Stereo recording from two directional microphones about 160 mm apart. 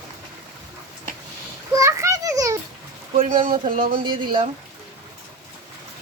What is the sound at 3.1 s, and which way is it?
Speech, 50° right (ahead or behind).